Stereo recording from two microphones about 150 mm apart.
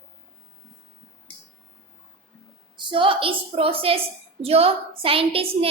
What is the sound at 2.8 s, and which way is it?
A woman's voice, 35° right (ahead or behind).